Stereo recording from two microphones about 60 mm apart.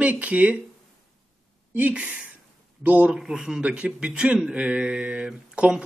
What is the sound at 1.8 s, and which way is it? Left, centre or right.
Speech, right.